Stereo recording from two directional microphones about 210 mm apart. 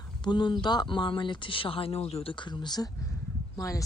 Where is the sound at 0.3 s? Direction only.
20° left (ahead or behind).